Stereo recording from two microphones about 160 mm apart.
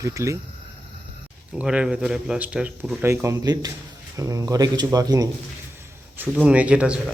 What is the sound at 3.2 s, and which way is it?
Speech, 20° right (ahead or behind).